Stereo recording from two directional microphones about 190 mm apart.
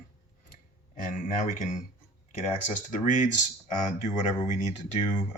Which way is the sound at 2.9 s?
40° left (ahead or behind).